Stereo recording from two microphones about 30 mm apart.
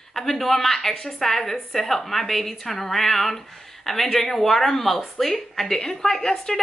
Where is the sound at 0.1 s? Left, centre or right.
Centre.